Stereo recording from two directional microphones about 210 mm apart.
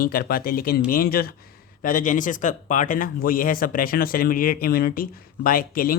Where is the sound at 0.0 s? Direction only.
45° left (ahead or behind).